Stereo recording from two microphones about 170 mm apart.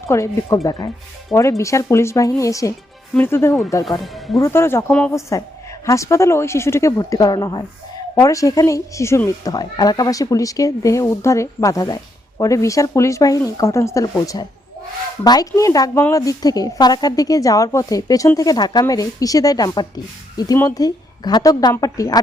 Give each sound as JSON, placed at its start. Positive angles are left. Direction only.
{"t": 0.1, "sound": "a woman's voice", "side_deg": 20}
{"t": 4.0, "sound": "speech", "side_deg": 0}
{"t": 4.4, "sound": "speech", "side_deg": 15}
{"t": 5.8, "sound": "a woman's voice", "side_deg": 15}